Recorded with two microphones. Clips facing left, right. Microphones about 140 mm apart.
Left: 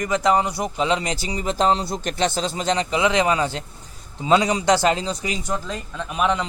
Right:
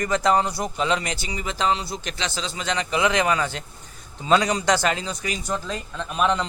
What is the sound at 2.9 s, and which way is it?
Speech, 20° left (ahead or behind).